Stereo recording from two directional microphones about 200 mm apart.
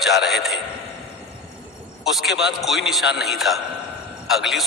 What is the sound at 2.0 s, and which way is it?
A man's voice, centre (ahead or behind).